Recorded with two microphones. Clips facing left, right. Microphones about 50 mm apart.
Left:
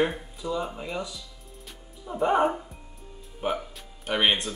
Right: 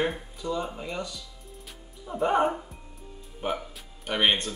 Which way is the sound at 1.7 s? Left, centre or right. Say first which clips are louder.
Left 1 dB; centre.